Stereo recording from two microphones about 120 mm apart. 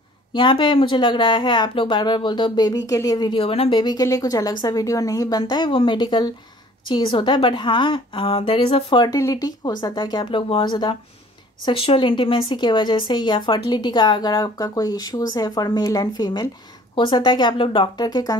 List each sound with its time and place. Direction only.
0.3 s a woman's voice: 40° left (ahead or behind)
3.8 s a woman's voice: 30° left (ahead or behind)